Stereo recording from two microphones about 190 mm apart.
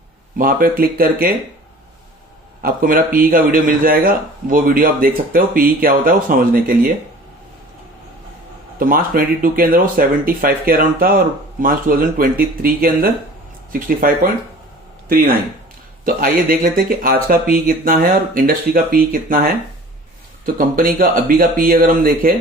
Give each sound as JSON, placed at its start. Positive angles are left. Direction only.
{"t": 0.3, "sound": "speech", "side_deg": -50}
{"t": 2.6, "sound": "speech", "side_deg": -50}
{"t": 8.8, "sound": "speech", "side_deg": -45}
{"t": 16.0, "sound": "speech", "side_deg": -50}